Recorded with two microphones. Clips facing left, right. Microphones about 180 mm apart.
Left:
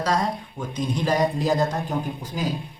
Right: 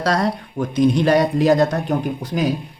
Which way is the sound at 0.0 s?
70° right (ahead or behind).